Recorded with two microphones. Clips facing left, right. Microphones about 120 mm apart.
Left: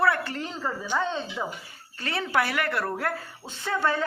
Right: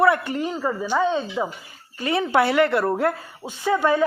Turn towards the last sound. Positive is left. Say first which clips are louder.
# right 7 dB
turn(degrees=-15)  # may be behind; listen again after turning